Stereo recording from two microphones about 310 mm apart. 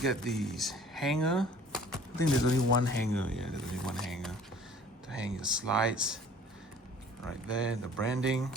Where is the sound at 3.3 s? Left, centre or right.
Centre.